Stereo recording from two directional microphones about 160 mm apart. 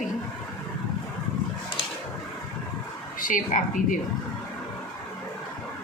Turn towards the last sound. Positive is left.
turn(degrees=55)  # may be behind; listen again after turning